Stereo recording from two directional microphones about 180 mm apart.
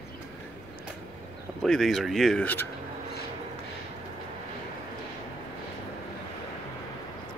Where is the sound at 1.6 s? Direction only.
Centre (ahead or behind).